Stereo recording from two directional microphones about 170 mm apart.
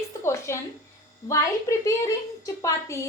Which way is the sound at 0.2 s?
15° left (ahead or behind).